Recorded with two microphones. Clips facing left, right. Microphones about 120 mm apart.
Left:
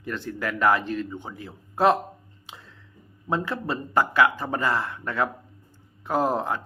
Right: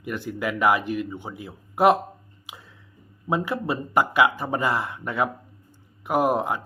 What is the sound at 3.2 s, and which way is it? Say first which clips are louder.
Speech: right 2 dB; 15° right (ahead or behind).